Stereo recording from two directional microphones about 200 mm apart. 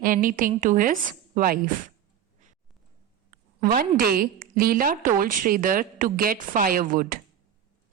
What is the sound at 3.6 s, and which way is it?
A woman's voice, 45° right (ahead or behind).